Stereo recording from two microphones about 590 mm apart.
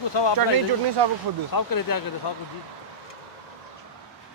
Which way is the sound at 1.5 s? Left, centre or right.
Left.